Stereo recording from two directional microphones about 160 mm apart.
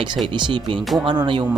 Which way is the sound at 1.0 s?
30° right (ahead or behind).